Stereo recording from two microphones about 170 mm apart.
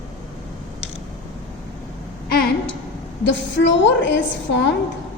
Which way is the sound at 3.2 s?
90° left.